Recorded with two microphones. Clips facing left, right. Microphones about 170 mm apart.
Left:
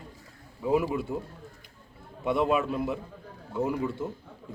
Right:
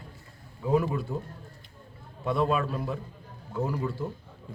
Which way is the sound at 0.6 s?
10° left (ahead or behind).